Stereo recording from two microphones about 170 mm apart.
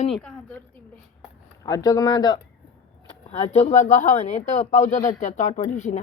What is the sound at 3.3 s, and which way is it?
Speech, 40° left (ahead or behind).